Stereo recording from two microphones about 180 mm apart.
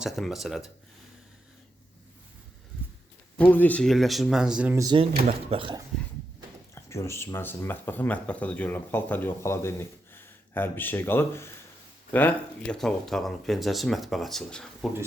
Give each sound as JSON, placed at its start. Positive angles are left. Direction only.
{"t": 0.0, "sound": "speech", "side_deg": 0}
{"t": 3.3, "sound": "speech", "side_deg": 10}
{"t": 4.8, "sound": "speech", "side_deg": -25}
{"t": 6.7, "sound": "speech", "side_deg": 15}